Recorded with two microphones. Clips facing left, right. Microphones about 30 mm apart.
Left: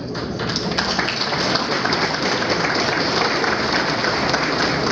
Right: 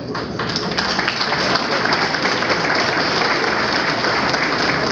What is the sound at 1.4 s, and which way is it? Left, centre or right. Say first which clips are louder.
Applause: right 2 dB; centre.